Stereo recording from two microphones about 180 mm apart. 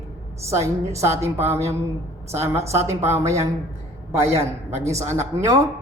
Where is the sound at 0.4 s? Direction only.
15° right (ahead or behind).